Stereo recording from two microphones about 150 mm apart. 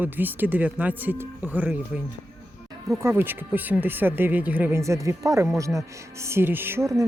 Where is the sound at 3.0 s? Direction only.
15° right (ahead or behind).